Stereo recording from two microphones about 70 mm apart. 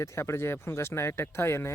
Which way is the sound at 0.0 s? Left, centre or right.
Left.